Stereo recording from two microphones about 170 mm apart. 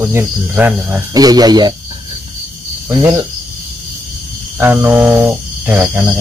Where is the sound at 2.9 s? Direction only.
25° right (ahead or behind).